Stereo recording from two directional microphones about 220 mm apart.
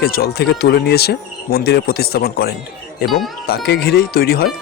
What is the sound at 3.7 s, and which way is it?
Speech, 50° left (ahead or behind).